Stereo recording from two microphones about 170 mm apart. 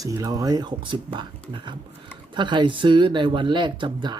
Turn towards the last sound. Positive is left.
turn(degrees=-25)  # may be behind; listen again after turning